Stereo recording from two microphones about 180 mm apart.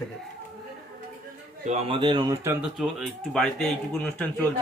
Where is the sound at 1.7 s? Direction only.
35° right (ahead or behind).